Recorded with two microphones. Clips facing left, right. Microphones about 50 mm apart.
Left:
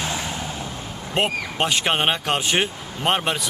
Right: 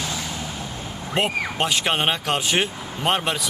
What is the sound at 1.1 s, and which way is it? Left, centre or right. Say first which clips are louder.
Speech: even; centre.